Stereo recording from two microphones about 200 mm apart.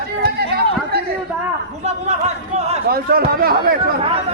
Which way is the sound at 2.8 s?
50° right (ahead or behind).